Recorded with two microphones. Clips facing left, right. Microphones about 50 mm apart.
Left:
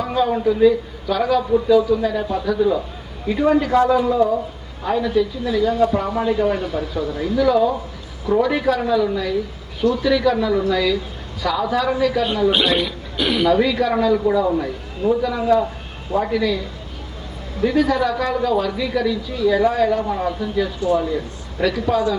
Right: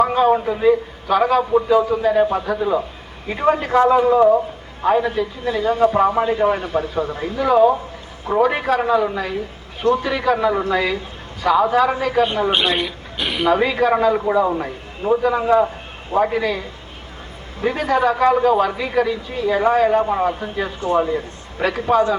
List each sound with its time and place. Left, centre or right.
0.1 s a man's voice: right
12.5 s a woman's voice: centre
13.5 s a man's voice: right